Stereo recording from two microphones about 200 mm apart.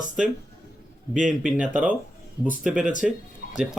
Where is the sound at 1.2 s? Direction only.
5° right (ahead or behind).